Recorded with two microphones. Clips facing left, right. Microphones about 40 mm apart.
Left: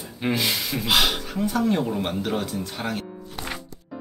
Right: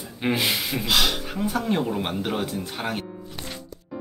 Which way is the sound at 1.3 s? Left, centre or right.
Centre.